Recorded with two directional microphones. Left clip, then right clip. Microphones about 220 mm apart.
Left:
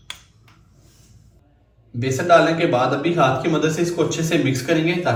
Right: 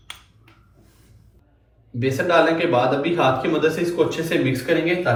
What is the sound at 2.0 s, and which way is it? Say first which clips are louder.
A man's voice: left 3 dB; centre (ahead or behind).